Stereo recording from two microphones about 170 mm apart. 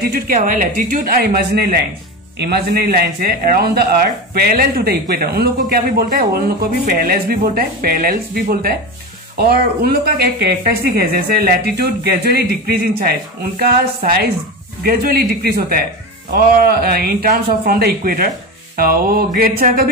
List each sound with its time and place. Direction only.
0.0 s a man's voice: 60° right (ahead or behind)